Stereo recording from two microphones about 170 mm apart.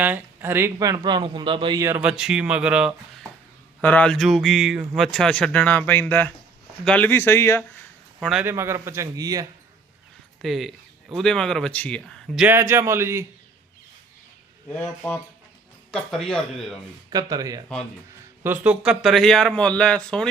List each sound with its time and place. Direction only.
0.0 s speech: 10° right (ahead or behind); by 1.8 s 30° right (ahead or behind)
1.8 s speech: 10° right (ahead or behind)
3.8 s speech: 10° left (ahead or behind)
8.2 s speech: centre (ahead or behind)
8.4 s a man's voice: 15° right (ahead or behind)
10.4 s speech: centre (ahead or behind)
12.4 s a man's voice: 10° right (ahead or behind)
14.7 s speech: 10° left (ahead or behind)
17.1 s speech: 20° right (ahead or behind)
18.4 s speech: 10° right (ahead or behind)